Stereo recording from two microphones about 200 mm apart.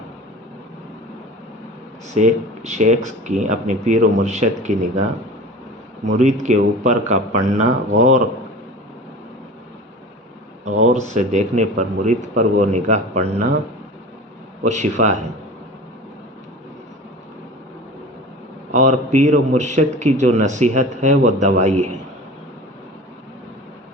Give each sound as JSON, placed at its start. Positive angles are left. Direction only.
{"t": 2.1, "sound": "a man's voice", "side_deg": -35}
{"t": 6.1, "sound": "a man's voice", "side_deg": -35}
{"t": 10.7, "sound": "a man's voice", "side_deg": -35}
{"t": 14.6, "sound": "a man's voice", "side_deg": -35}
{"t": 18.7, "sound": "a man's voice", "side_deg": -35}